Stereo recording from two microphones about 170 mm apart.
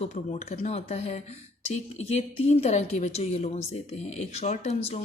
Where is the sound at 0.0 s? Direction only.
40° left (ahead or behind).